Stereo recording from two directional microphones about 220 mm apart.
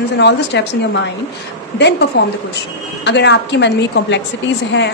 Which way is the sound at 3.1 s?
50° left (ahead or behind).